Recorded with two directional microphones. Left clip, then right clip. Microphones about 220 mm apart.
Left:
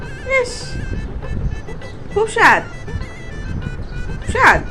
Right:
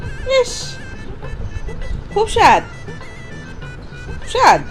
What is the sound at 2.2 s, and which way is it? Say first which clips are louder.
Speech: right 1 dB; 30° right (ahead or behind).